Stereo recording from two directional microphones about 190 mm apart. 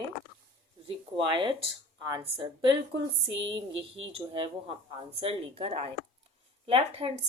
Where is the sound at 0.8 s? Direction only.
25° right (ahead or behind).